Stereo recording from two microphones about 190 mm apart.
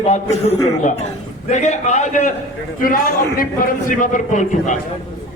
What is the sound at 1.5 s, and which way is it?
A man's voice, 35° left (ahead or behind).